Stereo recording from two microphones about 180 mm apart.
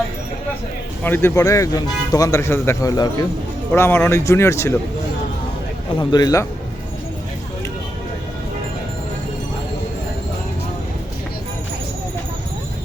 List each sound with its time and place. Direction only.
1.0 s speech: 10° left (ahead or behind)
6.0 s speech: 25° left (ahead or behind)